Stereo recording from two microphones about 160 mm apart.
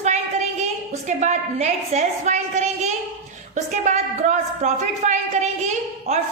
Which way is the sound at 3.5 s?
50° right (ahead or behind).